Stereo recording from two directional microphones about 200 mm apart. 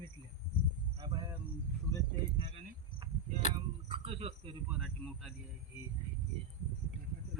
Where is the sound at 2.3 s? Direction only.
25° right (ahead or behind).